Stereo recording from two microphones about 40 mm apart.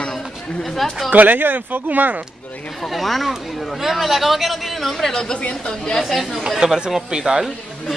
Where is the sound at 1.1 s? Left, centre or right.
Right.